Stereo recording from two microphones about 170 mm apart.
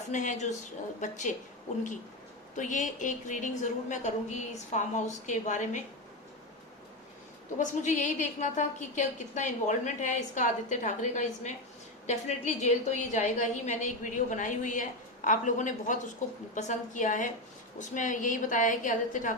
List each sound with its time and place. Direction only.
0.1 s a woman's voice: 45° left (ahead or behind)
2.6 s a woman's voice: 45° left (ahead or behind)
7.6 s a woman's voice: 45° left (ahead or behind)